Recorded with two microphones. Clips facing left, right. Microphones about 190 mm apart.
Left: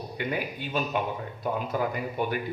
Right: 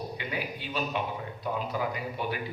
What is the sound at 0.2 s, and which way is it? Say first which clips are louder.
A man's voice: left 4 dB; 50° left (ahead or behind).